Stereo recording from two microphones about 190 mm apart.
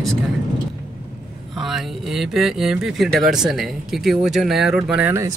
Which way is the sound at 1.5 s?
Centre (ahead or behind).